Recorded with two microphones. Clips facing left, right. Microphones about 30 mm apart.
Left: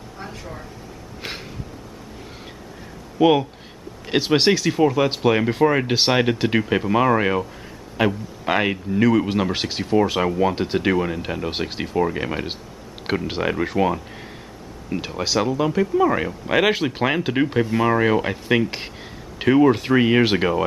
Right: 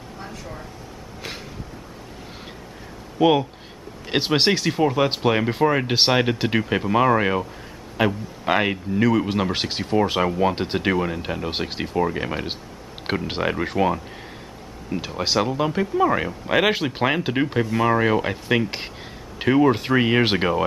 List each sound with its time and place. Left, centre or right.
3.2 s speech: centre
4.2 s speech: right
4.6 s speech: centre
15.2 s speech: centre